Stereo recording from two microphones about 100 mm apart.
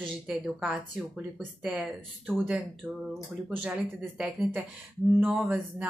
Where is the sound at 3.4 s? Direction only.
5° right (ahead or behind).